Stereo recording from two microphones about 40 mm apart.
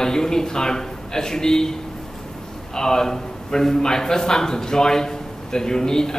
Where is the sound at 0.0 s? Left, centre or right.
Centre.